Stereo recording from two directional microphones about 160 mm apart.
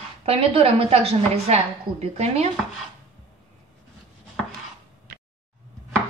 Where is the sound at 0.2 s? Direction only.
35° right (ahead or behind).